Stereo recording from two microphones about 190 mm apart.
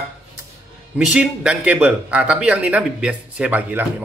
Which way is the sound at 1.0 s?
5° right (ahead or behind).